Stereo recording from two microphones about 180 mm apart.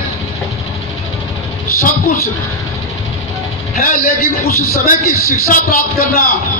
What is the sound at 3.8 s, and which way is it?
Speech, 50° left (ahead or behind).